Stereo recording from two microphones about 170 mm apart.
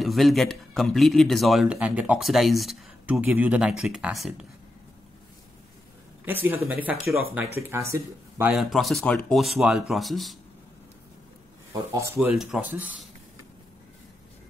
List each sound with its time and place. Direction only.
0.0 s speech: centre (ahead or behind)
6.2 s speech: 10° right (ahead or behind)
8.5 s speech: centre (ahead or behind)
11.7 s speech: 15° right (ahead or behind)
12.4 s speech: 5° right (ahead or behind)